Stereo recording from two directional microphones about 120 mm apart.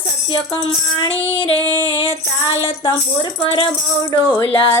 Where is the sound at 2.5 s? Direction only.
50° left (ahead or behind).